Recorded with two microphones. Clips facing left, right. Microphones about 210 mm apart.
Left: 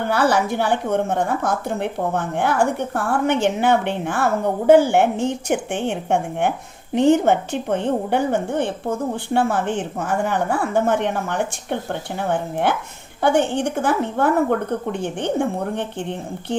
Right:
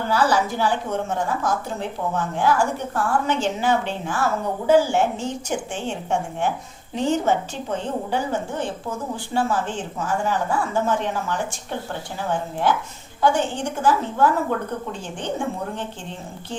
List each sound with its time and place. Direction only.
0.0 s a woman's voice: 60° left (ahead or behind)